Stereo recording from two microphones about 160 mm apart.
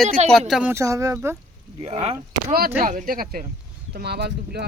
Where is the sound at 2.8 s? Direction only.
60° right (ahead or behind).